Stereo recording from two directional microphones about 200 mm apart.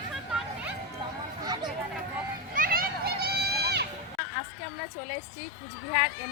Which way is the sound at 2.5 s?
45° right (ahead or behind).